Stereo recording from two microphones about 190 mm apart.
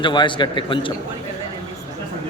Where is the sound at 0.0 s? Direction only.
25° left (ahead or behind).